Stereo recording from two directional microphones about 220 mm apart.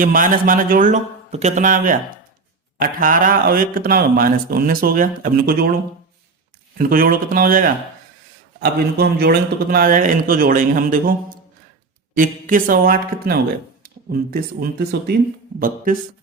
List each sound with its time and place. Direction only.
0.0 s speech: 40° right (ahead or behind)
6.7 s speech: 40° right (ahead or behind)